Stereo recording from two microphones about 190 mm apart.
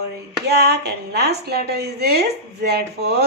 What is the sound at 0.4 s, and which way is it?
A woman's voice, 60° right (ahead or behind).